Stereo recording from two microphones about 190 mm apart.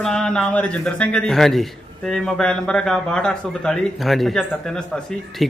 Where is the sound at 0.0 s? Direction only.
5° left (ahead or behind).